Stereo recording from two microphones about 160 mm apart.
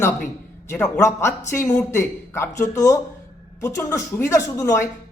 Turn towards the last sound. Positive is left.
turn(degrees=15)  # may be behind; listen again after turning